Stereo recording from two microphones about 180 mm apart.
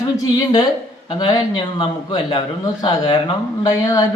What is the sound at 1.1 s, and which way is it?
A man's voice, 25° left (ahead or behind).